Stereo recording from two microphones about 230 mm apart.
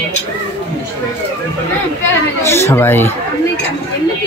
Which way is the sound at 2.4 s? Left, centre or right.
Centre.